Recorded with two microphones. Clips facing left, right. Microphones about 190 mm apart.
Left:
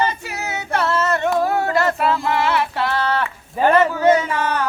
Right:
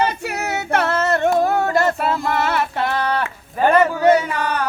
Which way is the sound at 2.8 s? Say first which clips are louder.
Even; 15° right (ahead or behind).